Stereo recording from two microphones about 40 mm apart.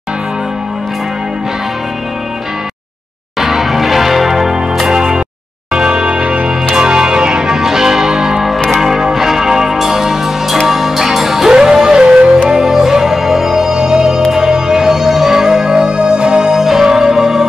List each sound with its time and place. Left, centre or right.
3.3 s change ringing: centre
5.7 s music: right